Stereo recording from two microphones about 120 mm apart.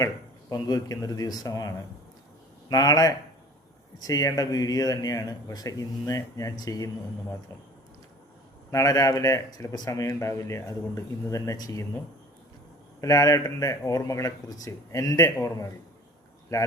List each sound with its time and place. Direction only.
0.5 s a man's voice: 30° left (ahead or behind)
8.7 s speech: 30° left (ahead or behind)
13.0 s speech: 30° left (ahead or behind)